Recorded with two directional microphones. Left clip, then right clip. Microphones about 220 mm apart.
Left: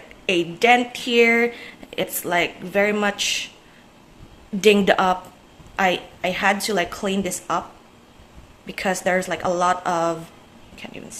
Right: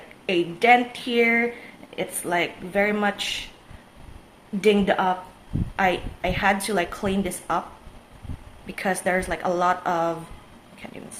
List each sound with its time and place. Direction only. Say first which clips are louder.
0.3 s a woman's voice: left 1 dB; 15° left (ahead or behind)
4.6 s a woman's voice: left 4 dB; 20° left (ahead or behind)
8.6 s a woman's voice: left 2 dB; 15° left (ahead or behind)
10.8 s a sound: left 3 dB; 15° left (ahead or behind)